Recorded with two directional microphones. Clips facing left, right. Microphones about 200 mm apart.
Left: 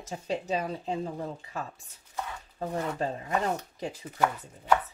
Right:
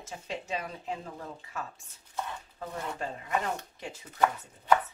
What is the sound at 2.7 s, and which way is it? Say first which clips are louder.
Speech: left 5 dB; 35° left (ahead or behind).